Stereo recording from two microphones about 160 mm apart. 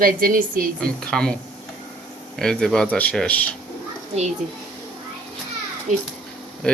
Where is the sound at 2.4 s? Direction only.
5° left (ahead or behind).